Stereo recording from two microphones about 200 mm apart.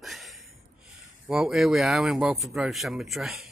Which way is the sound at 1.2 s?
Centre (ahead or behind).